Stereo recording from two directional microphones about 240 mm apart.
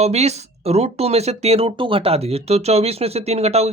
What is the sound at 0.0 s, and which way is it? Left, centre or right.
Speech, right.